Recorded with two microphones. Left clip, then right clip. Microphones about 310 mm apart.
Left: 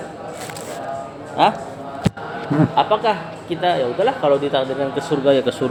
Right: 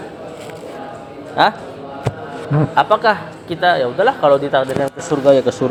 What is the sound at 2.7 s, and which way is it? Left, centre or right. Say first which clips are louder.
A man's voice: right 5 dB; right.